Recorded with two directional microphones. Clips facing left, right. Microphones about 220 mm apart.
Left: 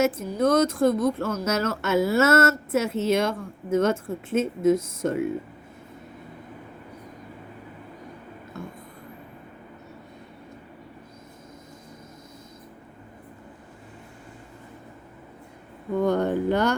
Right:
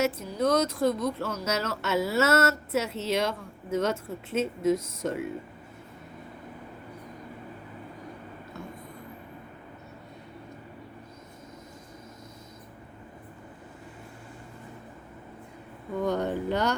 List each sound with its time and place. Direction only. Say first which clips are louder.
0.0 s speech: left 4 dB; 50° left (ahead or behind)
16.0 s speech: left 5 dB; 50° left (ahead or behind)